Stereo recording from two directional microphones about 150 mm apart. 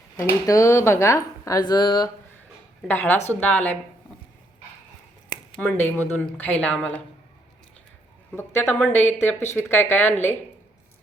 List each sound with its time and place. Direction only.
0.2 s speech: 20° left (ahead or behind)
2.8 s a woman's voice: 10° left (ahead or behind)
5.5 s a woman's voice: 15° left (ahead or behind)
8.3 s a woman's voice: 15° left (ahead or behind)